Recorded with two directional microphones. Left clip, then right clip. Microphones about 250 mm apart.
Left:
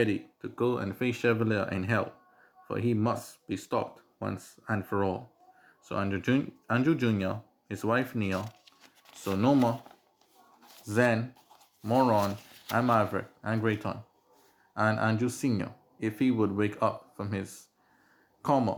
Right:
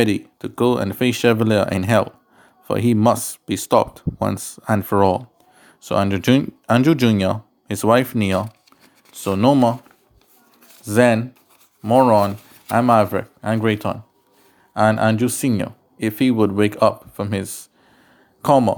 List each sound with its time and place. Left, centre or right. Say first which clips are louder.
0.0 s speech: right 10 dB; right
10.8 s speech: right 11 dB; right